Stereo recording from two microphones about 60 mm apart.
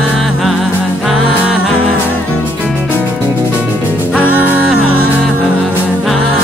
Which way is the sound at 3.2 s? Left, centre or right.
Right.